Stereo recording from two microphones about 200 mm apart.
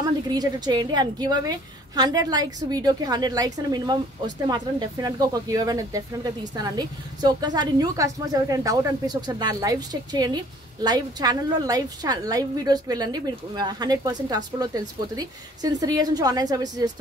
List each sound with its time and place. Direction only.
0.0 s speech: 20° right (ahead or behind)